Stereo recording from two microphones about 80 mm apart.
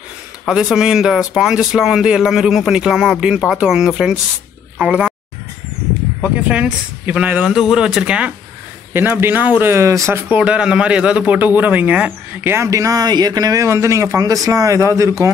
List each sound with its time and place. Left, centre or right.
0.5 s speech: centre
6.3 s speech: centre
8.9 s speech: right
10.3 s speech: centre
12.6 s speech: right